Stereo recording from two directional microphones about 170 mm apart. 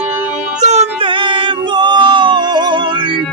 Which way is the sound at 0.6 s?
40° right (ahead or behind).